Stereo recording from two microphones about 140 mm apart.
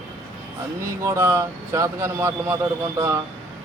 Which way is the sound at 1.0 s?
20° right (ahead or behind).